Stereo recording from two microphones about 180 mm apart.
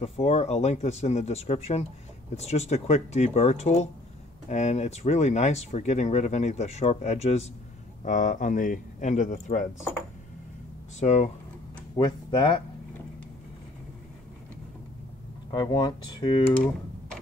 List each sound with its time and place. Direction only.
0.0 s speech: 35° left (ahead or behind)
11.0 s speech: 40° left (ahead or behind)
12.0 s speech: 25° left (ahead or behind)
15.5 s speech: 20° left (ahead or behind)